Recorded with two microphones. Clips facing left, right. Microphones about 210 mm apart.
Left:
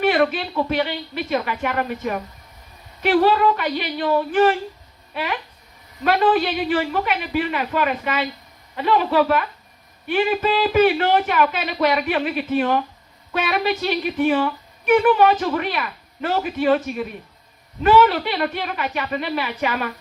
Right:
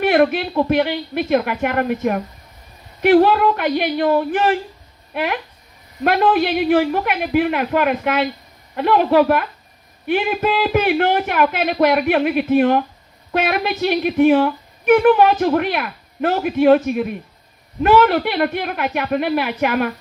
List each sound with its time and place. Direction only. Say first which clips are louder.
0.0 s a man's voice: right 3 dB; 55° right (ahead or behind)